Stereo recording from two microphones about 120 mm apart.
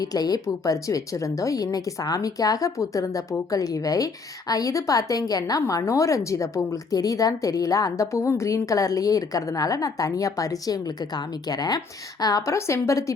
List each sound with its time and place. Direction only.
0.0 s a woman's voice: 30° left (ahead or behind)